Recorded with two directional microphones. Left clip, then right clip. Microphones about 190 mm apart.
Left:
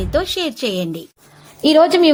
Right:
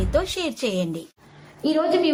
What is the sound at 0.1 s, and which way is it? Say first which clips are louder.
Speech: left 5 dB; 30° left (ahead or behind).